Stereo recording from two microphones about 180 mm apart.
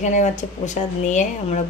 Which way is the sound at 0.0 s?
40° left (ahead or behind).